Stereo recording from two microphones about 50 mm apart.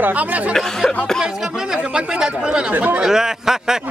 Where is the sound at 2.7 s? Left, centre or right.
Right.